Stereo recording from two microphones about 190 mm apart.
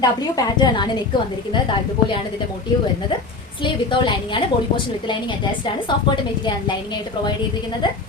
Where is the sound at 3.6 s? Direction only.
25° left (ahead or behind).